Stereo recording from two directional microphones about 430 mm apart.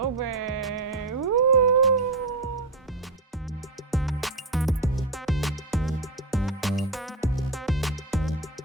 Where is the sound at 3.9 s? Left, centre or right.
Centre.